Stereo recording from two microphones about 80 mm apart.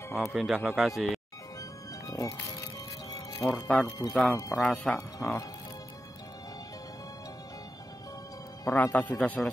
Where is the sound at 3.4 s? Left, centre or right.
Left.